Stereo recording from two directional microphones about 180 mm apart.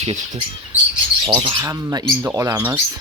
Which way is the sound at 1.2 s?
30° right (ahead or behind).